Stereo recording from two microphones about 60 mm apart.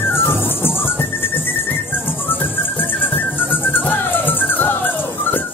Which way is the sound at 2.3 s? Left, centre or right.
Left.